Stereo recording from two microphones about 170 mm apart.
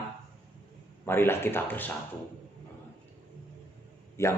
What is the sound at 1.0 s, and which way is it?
Speech, 15° left (ahead or behind).